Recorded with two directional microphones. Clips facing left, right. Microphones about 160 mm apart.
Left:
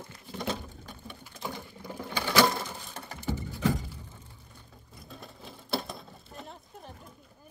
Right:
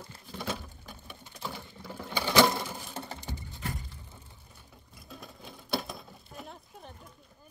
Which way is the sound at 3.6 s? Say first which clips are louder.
Left 12 dB; 85° left.